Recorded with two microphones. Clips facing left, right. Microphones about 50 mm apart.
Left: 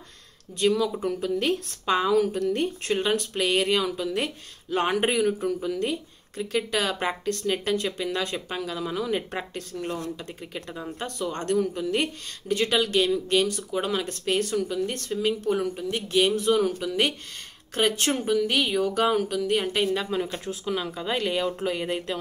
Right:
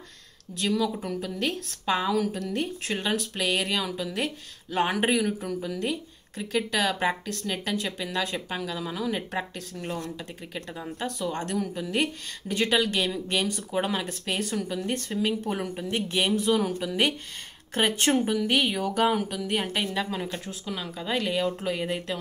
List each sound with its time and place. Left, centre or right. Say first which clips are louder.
0.6 s speech: left 3 dB; centre
13.1 s speech: left 5 dB; centre
16.3 s speech: left 2 dB; centre
17.7 s speech: right 1 dB; centre
19.8 s speech: left 4 dB; centre